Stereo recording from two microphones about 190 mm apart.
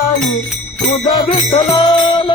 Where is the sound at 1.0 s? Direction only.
25° left (ahead or behind).